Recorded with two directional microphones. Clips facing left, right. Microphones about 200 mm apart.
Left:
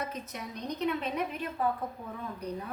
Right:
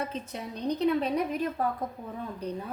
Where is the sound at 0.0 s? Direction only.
30° right (ahead or behind).